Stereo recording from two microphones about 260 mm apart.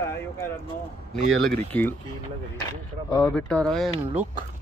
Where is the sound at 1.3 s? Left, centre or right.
Centre.